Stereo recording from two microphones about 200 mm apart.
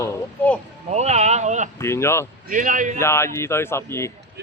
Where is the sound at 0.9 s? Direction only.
35° right (ahead or behind).